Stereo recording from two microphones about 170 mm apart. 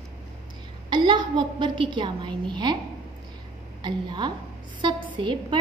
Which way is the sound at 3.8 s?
25° right (ahead or behind).